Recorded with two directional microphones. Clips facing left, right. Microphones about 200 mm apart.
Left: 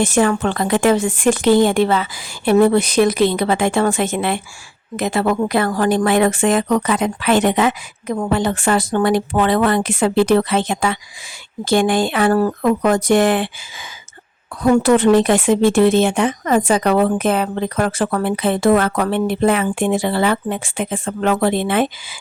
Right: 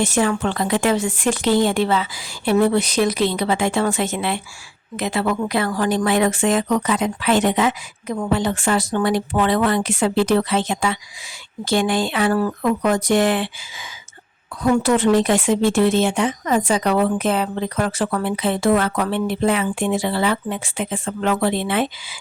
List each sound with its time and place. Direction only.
0.0 s speech: 50° left (ahead or behind)
14.6 s speech: 55° left (ahead or behind)